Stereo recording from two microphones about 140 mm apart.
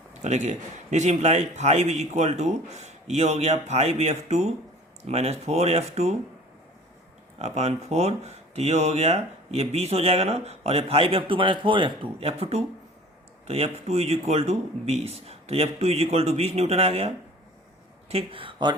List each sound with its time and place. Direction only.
0.1 s speech: 55° right (ahead or behind)
7.3 s speech: 50° right (ahead or behind)
18.1 s speech: 40° right (ahead or behind)